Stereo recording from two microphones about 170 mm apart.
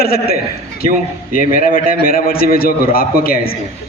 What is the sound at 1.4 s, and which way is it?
A man's voice, 55° left (ahead or behind).